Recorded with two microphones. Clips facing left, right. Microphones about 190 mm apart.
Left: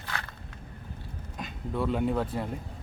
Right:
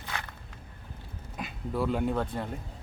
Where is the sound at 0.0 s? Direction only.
15° right (ahead or behind).